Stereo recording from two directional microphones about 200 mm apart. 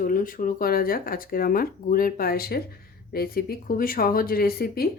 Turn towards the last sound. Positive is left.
turn(degrees=50)  # may be behind; listen again after turning